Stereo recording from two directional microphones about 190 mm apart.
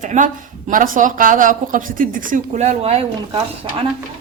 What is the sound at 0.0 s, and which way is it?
A woman's voice, 40° right (ahead or behind).